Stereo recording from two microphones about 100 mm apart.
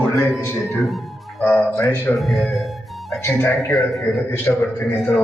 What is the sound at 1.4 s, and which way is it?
Speech, 15° left (ahead or behind).